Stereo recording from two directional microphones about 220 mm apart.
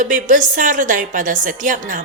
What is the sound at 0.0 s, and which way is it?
A woman's voice, 35° right (ahead or behind).